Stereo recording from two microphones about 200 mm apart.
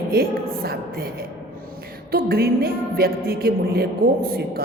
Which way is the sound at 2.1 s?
50° right (ahead or behind).